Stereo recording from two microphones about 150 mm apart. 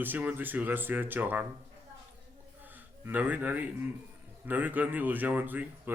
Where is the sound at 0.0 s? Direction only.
10° right (ahead or behind).